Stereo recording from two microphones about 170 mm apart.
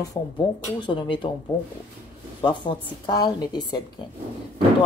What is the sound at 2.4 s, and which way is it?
A woman's voice, 25° left (ahead or behind).